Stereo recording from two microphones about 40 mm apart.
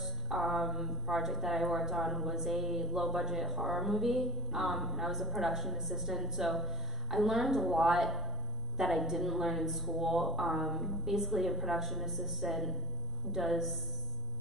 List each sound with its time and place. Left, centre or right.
0.0 s speech: centre